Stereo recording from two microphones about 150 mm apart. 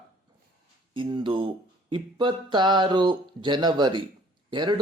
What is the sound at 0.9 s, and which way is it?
Speech, 30° right (ahead or behind).